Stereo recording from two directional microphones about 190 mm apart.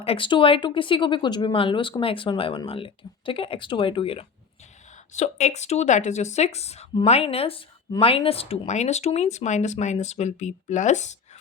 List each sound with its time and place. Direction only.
0.0 s speech: 30° left (ahead or behind)